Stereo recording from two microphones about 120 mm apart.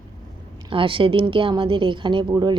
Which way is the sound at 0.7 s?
45° right (ahead or behind).